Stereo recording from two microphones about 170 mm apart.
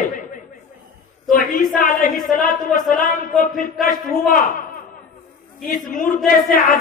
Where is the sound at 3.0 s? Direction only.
55° left (ahead or behind).